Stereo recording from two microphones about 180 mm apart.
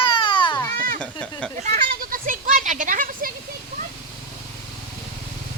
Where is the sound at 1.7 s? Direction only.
45° right (ahead or behind).